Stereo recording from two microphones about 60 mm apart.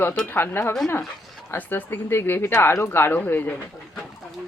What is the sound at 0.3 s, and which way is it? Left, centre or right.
Speech, left.